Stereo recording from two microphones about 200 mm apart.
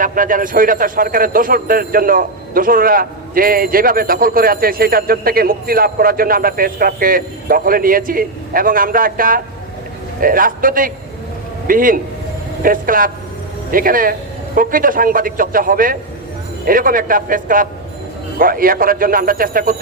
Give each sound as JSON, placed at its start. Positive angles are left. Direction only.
{"t": 0.0, "sound": "a man's voice", "side_deg": -45}